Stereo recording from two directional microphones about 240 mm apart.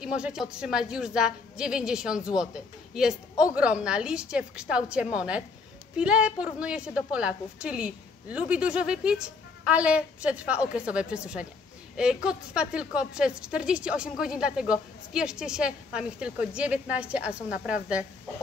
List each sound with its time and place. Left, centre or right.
0.0 s a woman's voice: centre